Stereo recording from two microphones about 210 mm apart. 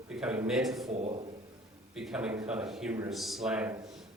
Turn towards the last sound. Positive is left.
turn(degrees=-5)  # may be behind; listen again after turning